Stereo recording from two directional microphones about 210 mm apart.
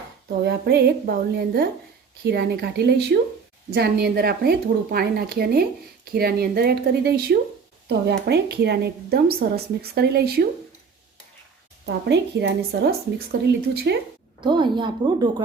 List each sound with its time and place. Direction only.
0.4 s a woman's voice: 50° right (ahead or behind)
11.9 s a woman's voice: 55° right (ahead or behind)
14.4 s speech: 20° right (ahead or behind)